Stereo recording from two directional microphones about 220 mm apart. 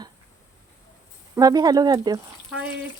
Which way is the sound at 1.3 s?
15° right (ahead or behind).